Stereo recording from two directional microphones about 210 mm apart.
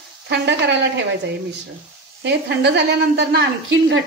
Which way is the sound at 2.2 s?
55° right (ahead or behind).